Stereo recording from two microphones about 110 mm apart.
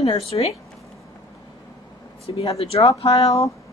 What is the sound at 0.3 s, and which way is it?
Speech, 50° left (ahead or behind).